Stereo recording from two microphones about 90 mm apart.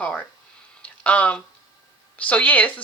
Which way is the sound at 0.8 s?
15° left (ahead or behind).